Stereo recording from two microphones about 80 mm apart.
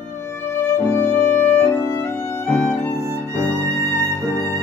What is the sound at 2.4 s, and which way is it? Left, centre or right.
Music, left.